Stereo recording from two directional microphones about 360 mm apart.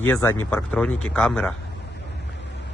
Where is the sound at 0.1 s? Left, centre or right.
Centre.